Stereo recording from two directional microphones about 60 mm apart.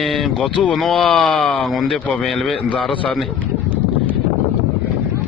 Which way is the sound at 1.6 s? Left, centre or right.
Centre.